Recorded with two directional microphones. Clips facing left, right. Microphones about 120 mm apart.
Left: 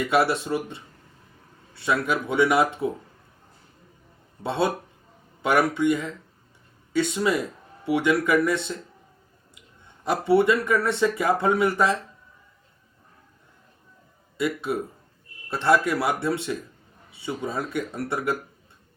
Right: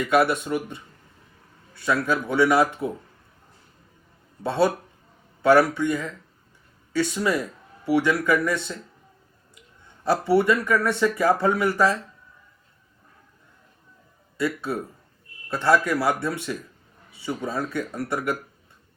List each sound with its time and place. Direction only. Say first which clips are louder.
0.1 s speech: right 2 dB; 30° left (ahead or behind)
4.4 s speech: right 3 dB; 25° left (ahead or behind)
14.3 s speech: even; 20° left (ahead or behind)